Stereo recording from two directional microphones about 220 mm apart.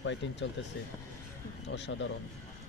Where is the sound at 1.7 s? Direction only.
55° left (ahead or behind).